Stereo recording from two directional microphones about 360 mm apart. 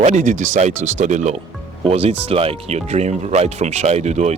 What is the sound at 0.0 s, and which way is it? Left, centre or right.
Speech, centre.